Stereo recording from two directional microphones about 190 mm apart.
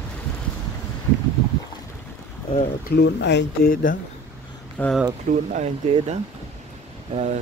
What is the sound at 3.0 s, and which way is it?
Speech, 65° left (ahead or behind).